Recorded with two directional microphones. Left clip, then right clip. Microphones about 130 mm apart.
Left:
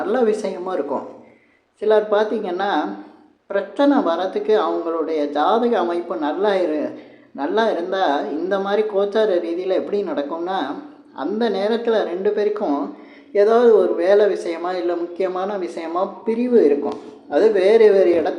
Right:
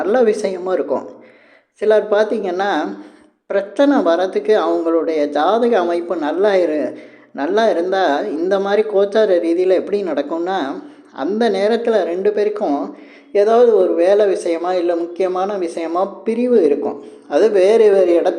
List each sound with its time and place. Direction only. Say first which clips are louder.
0.0 s a man's voice: right 4 dB; 35° right (ahead or behind)